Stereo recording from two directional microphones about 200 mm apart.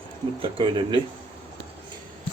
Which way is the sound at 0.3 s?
25° right (ahead or behind).